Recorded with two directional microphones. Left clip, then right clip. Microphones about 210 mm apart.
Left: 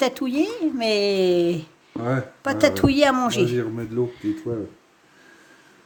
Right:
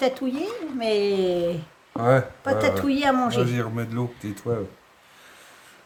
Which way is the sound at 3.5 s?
50° right (ahead or behind).